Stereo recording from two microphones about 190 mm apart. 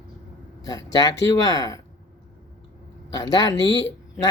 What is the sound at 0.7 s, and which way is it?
Speech, 20° left (ahead or behind).